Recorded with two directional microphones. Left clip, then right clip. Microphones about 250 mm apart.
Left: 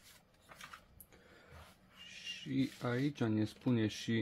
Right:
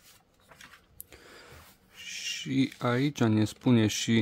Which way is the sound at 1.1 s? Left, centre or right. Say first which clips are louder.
Right 12 dB; right.